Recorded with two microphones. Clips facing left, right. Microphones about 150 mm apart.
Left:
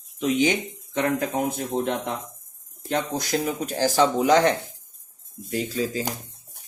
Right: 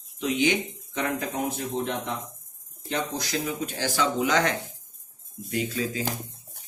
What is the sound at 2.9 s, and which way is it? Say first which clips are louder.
Speech: left 4 dB; 50° left (ahead or behind).